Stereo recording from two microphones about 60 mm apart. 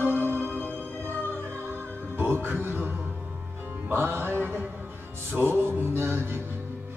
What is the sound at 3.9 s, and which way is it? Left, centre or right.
Music, right.